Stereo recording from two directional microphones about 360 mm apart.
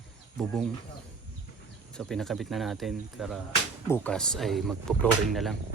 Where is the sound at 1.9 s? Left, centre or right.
Centre.